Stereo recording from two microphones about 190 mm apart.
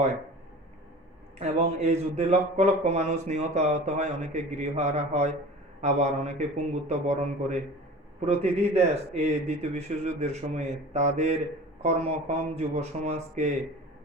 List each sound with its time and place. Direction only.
1.4 s a man's voice: 35° right (ahead or behind)
12.3 s a man's voice: 35° right (ahead or behind)